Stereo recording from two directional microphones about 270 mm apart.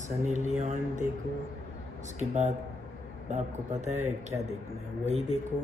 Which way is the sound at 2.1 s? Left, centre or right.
Right.